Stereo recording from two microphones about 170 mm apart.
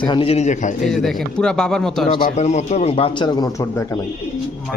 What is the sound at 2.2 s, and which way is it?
A man's voice, 45° left (ahead or behind).